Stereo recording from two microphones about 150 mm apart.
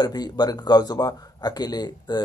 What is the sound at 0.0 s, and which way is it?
Speech, 25° left (ahead or behind).